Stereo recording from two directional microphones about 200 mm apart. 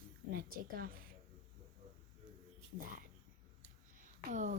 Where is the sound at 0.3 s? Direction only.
45° right (ahead or behind).